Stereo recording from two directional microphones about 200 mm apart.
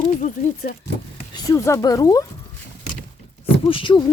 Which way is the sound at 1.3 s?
20° left (ahead or behind).